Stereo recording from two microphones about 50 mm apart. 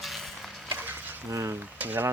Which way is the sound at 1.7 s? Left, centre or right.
Right.